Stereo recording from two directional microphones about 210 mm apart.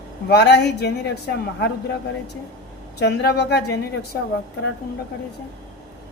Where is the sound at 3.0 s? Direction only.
50° left (ahead or behind).